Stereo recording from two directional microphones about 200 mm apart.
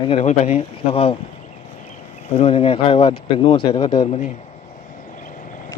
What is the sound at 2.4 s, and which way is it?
Speech, 30° left (ahead or behind).